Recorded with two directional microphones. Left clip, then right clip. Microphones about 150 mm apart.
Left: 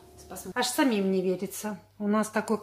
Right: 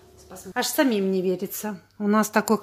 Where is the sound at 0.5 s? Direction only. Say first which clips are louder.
Right 4 dB; 50° right (ahead or behind).